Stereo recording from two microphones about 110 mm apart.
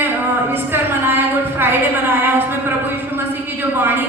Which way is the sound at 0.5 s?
20° right (ahead or behind).